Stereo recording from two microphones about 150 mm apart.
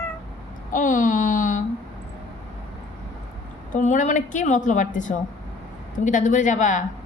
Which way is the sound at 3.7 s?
55° left (ahead or behind).